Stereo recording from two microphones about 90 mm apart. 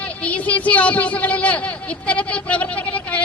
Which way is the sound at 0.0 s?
15° left (ahead or behind).